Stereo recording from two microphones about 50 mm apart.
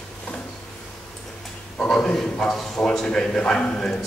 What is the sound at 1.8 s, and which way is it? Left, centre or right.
A man's voice, centre.